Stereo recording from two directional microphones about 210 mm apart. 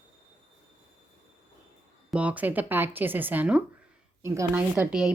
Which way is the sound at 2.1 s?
5° right (ahead or behind).